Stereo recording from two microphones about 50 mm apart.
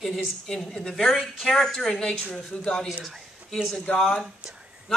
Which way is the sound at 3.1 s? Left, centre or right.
Centre.